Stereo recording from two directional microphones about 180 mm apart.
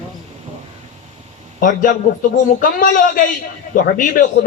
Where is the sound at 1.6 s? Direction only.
50° left (ahead or behind).